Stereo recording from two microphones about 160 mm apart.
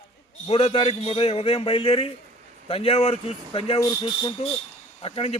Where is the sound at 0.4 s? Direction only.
35° left (ahead or behind).